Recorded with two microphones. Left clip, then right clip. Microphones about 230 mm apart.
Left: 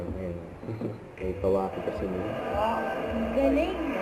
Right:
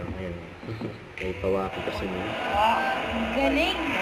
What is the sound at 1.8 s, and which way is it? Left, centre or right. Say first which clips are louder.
Speech: right 1 dB; centre.